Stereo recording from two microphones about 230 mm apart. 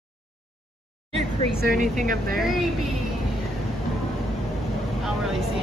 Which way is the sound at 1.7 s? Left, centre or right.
Right.